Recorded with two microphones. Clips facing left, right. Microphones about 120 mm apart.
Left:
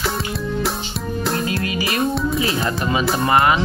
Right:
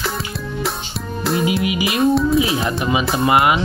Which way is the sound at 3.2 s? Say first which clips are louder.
Right 1 dB; 15° right (ahead or behind).